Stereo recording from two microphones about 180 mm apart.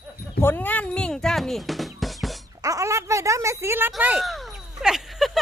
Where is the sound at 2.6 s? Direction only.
20° right (ahead or behind).